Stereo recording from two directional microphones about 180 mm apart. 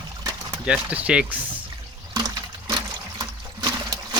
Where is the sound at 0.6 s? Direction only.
5° right (ahead or behind).